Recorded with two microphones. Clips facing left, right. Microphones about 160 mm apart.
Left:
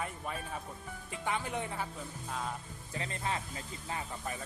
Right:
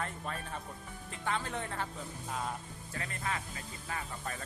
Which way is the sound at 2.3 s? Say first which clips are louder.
Right 1 dB; centre (ahead or behind).